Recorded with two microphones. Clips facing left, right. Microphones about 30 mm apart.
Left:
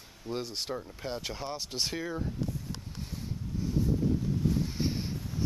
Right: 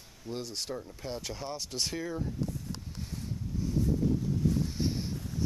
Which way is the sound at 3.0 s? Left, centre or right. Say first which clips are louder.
Right 1 dB; centre.